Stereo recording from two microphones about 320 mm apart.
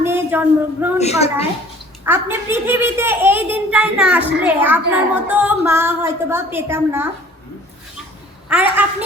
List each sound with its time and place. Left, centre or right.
0.0 s speech: centre
0.9 s a woman's voice: centre
2.0 s a child's voice: centre
8.4 s a woman's voice: centre